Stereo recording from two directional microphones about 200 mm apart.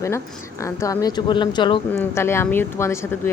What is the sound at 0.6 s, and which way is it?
A woman's voice, 15° left (ahead or behind).